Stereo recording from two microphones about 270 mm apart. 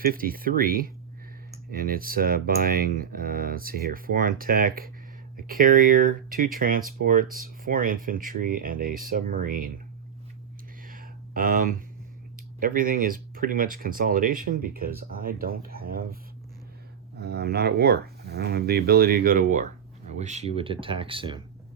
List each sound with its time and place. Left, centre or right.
0.0 s speech: right
10.8 s a sound: right
12.5 s speech: right
17.2 s speech: right; by 21.4 s centre